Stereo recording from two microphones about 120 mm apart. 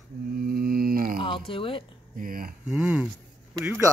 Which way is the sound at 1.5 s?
45° left (ahead or behind).